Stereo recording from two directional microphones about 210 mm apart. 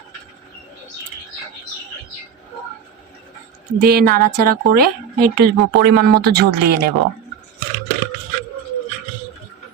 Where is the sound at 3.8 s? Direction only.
45° right (ahead or behind).